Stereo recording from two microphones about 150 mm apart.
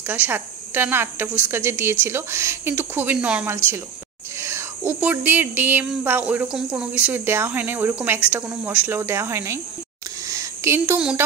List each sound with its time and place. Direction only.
0.1 s speech: 15° right (ahead or behind)
4.4 s speech: 20° right (ahead or behind)
10.2 s a sound: 20° right (ahead or behind)
11.0 s speech: 5° right (ahead or behind)